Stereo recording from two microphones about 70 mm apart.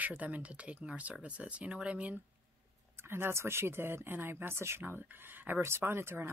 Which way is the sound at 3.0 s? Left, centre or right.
Right.